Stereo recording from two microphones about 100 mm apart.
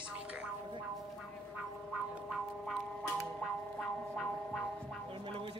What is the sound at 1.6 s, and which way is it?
Effects unit, 5° right (ahead or behind).